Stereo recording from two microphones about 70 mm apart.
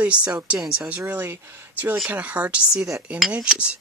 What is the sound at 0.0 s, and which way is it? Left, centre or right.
Speech, centre.